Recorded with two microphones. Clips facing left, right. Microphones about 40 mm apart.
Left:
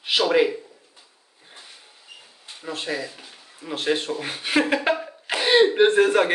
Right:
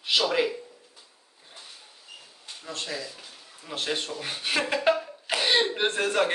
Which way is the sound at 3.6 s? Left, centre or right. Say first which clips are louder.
Left 6 dB; centre.